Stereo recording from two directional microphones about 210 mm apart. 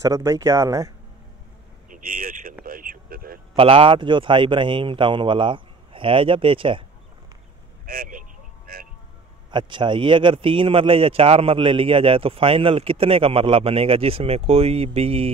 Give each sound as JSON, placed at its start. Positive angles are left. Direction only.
{"t": 0.0, "sound": "speech", "side_deg": -15}
{"t": 1.9, "sound": "speech", "side_deg": -40}
{"t": 2.6, "sound": "vehicle", "side_deg": -40}
{"t": 3.5, "sound": "a man's voice", "side_deg": -25}
{"t": 7.8, "sound": "speech", "side_deg": -45}
{"t": 9.5, "sound": "a man's voice", "side_deg": -20}